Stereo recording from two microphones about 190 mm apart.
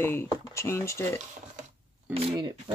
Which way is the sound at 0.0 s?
10° left (ahead or behind).